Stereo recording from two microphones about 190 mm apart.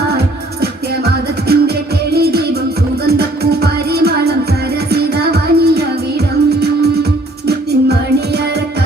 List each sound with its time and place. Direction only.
0.6 s music: 55° right (ahead or behind)